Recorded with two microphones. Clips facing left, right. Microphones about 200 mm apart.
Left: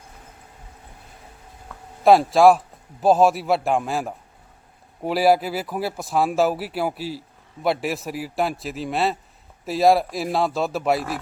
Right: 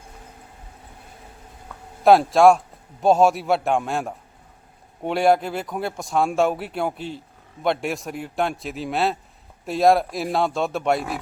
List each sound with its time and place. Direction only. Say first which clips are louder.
2.0 s speech: even; centre (ahead or behind)